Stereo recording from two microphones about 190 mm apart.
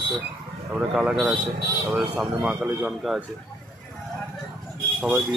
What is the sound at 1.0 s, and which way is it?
Speech, 5° right (ahead or behind).